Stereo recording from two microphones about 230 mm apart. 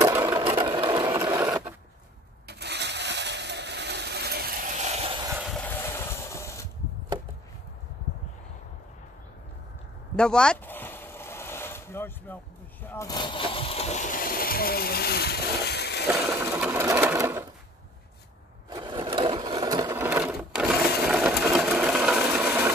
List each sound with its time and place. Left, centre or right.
0.0 s sewing machine: centre
2.4 s a sound: right
5.3 s vehicle: centre
5.9 s mechanisms: centre
10.1 s vehicle: centre
12.8 s a sound: centre; by 16.1 s left
16.1 s sewing machine: centre
18.7 s sewing machine: centre